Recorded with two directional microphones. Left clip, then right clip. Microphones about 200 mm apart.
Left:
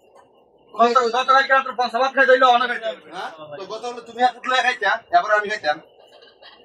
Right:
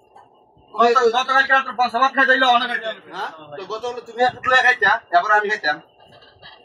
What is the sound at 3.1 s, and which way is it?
A man's voice, 15° left (ahead or behind).